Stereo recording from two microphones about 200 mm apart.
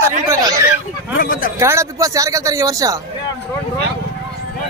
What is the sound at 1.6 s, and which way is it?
Speech, 15° right (ahead or behind).